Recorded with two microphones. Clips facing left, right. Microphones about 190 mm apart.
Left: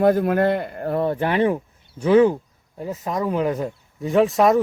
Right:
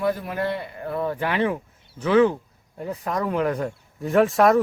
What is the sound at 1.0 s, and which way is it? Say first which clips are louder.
Speech: left 3 dB; 35° left (ahead or behind).